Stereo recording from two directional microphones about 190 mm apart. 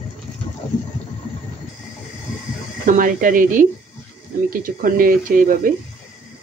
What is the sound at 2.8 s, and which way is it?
Speech, 45° right (ahead or behind).